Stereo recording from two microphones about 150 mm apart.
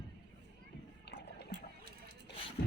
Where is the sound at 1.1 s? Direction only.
90° left.